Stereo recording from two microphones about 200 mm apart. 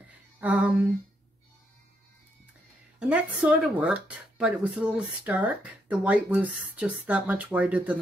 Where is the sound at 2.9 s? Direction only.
5° right (ahead or behind).